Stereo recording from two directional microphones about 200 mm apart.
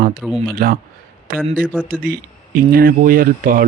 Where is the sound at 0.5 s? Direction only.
45° right (ahead or behind).